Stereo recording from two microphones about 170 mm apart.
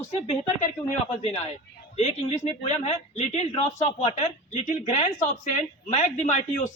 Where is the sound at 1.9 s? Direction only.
40° left (ahead or behind).